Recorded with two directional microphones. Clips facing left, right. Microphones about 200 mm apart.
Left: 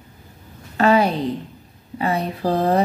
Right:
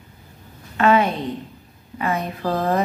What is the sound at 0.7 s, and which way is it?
A woman's voice, 35° left (ahead or behind).